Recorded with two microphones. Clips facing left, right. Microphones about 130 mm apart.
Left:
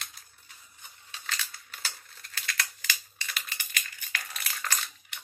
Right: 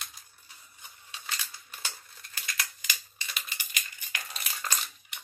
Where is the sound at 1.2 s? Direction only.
15° right (ahead or behind).